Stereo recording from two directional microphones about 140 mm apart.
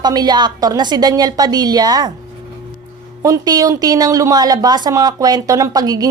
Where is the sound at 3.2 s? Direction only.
25° right (ahead or behind).